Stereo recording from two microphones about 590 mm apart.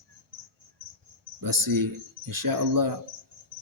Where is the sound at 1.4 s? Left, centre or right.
Right.